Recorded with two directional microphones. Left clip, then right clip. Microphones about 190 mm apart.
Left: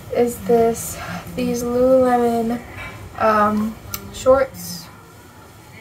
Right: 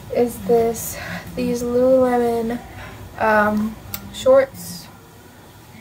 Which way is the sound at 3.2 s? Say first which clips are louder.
Even; centre (ahead or behind).